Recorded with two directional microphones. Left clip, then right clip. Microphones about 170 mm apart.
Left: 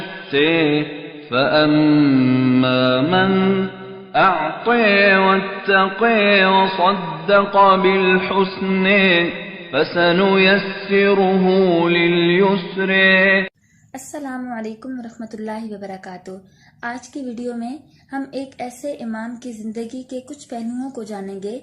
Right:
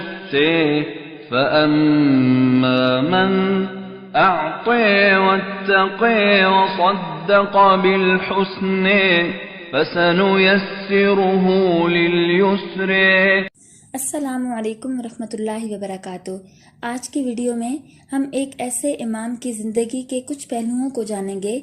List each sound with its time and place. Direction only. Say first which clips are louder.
0.3 s mantra: even; centre (ahead or behind)
13.9 s a woman's voice: right 4 dB; 35° right (ahead or behind)
20.5 s a woman's voice: right 4 dB; 30° right (ahead or behind)